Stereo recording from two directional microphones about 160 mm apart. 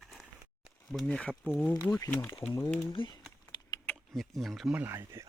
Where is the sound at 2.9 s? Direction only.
30° left (ahead or behind).